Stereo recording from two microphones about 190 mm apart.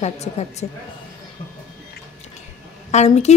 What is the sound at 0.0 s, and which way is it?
Speech, 35° left (ahead or behind).